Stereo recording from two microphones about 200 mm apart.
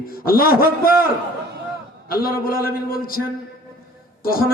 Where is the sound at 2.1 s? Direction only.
50° left (ahead or behind).